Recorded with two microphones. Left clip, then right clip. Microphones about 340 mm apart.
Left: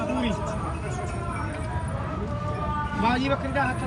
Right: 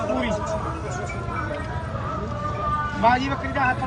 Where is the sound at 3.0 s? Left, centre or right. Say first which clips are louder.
Right 5 dB; centre.